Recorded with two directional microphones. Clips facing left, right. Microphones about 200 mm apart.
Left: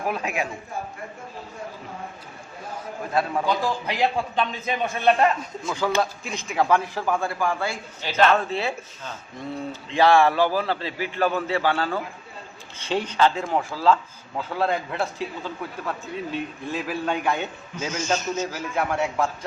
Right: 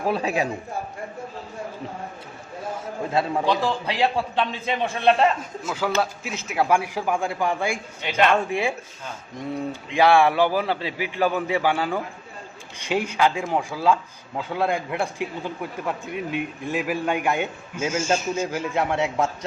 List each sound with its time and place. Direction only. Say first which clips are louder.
0.0 s a man's voice: right 4 dB; 30° right (ahead or behind)
3.1 s a man's voice: right 1 dB; 25° right (ahead or behind)
5.4 s speech: even; 5° right (ahead or behind)
18.5 s a man's voice: right 2 dB; 20° right (ahead or behind)